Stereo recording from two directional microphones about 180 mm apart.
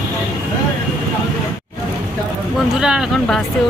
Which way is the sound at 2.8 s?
Centre (ahead or behind).